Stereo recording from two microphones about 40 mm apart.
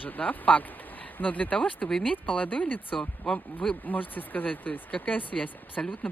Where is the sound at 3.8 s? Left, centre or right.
Left.